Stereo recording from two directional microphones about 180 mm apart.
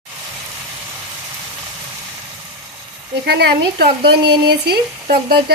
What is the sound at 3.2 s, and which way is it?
Speech, 65° right (ahead or behind).